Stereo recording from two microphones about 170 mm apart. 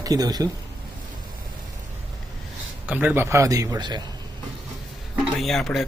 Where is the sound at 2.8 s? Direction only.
10° right (ahead or behind); by 4.0 s 25° right (ahead or behind).